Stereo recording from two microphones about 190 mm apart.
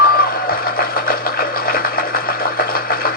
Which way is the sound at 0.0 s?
50° left (ahead or behind).